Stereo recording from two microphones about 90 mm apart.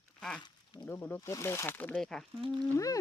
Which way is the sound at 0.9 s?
25° left (ahead or behind).